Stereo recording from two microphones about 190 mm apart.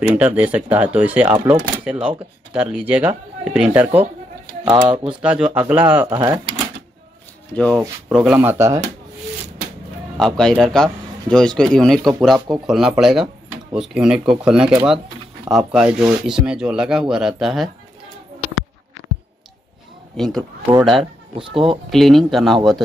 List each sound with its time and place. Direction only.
0.1 s speech: 10° right (ahead or behind)
4.6 s speech: 25° right (ahead or behind)
5.2 s speech: 5° right (ahead or behind)
6.0 s speech: 25° right (ahead or behind)
7.5 s speech: 5° left (ahead or behind); by 8.8 s 15° right (ahead or behind)
10.1 s speech: 5° left (ahead or behind)
20.2 s speech: centre (ahead or behind)
21.0 s speech: 25° right (ahead or behind)
21.9 s speech: centre (ahead or behind)